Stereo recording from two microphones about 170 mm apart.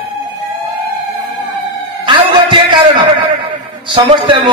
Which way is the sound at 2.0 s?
30° right (ahead or behind).